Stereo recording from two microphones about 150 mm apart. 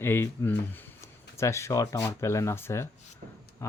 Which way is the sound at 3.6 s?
20° left (ahead or behind).